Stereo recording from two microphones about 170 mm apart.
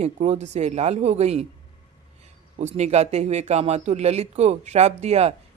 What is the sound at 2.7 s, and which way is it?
Speech, 40° right (ahead or behind).